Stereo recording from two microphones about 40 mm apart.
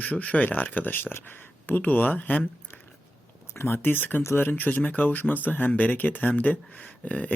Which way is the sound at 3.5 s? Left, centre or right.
Left.